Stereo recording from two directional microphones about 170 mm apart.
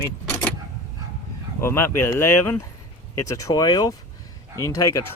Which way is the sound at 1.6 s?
15° left (ahead or behind).